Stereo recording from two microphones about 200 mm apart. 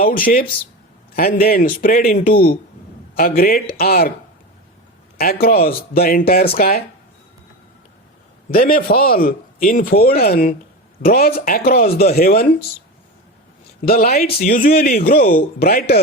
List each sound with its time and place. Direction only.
0.2 s speech: 45° left (ahead or behind)
5.1 s speech: 50° left (ahead or behind)
8.4 s speech: 45° left (ahead or behind)
13.8 s speech: 50° left (ahead or behind)